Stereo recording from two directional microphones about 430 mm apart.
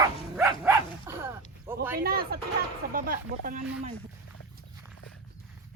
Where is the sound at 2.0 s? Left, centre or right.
Right.